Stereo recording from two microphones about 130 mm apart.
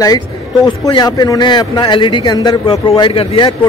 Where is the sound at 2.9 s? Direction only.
45° left (ahead or behind).